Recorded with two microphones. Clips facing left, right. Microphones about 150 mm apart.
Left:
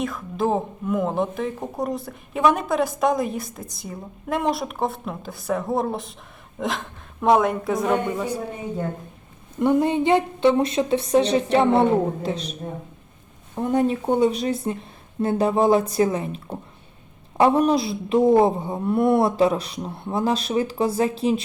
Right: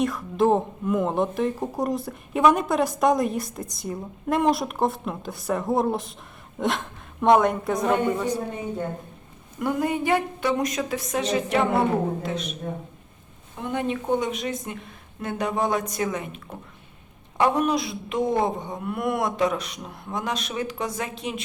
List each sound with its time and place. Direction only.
0.0 s speech: centre (ahead or behind)
9.6 s a woman's voice: 25° left (ahead or behind)
13.6 s a woman's voice: 40° left (ahead or behind)